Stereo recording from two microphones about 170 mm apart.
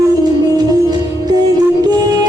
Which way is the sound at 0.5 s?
25° right (ahead or behind).